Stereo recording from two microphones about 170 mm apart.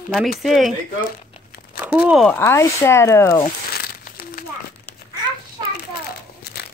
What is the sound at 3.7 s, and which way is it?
Crumpling, 65° left (ahead or behind).